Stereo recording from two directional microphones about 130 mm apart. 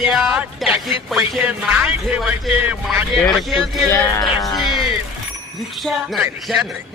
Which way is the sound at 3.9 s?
25° left (ahead or behind).